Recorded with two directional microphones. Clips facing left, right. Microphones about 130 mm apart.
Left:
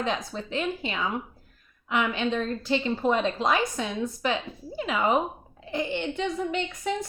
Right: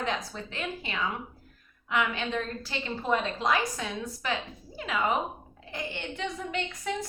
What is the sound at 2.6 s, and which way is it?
A woman's voice, 20° left (ahead or behind).